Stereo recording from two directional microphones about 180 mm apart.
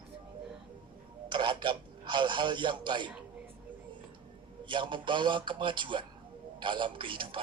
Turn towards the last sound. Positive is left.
turn(degrees=-30)  # may be behind; listen again after turning